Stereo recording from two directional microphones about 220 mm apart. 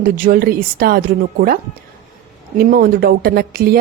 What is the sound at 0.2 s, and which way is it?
A woman's voice, 40° right (ahead or behind).